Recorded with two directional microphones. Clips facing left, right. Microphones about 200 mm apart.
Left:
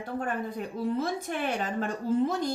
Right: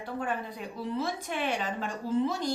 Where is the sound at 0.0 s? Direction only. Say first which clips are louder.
Left 2 dB; 45° left (ahead or behind).